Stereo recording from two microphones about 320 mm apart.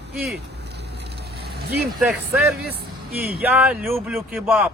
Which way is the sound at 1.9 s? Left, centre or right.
Centre.